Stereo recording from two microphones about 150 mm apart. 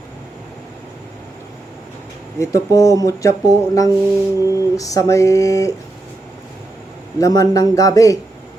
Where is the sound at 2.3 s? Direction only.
20° left (ahead or behind).